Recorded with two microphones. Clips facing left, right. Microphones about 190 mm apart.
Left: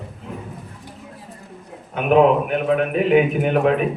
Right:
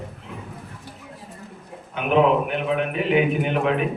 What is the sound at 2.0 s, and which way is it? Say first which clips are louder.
A man's voice: left 4 dB; 45° left (ahead or behind).